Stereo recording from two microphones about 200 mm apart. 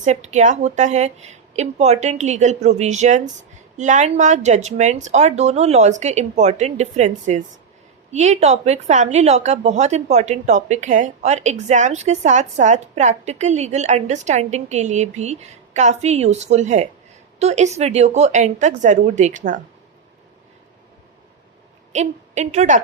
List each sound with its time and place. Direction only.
0.0 s a woman's voice: 35° right (ahead or behind)
21.9 s a woman's voice: 35° right (ahead or behind)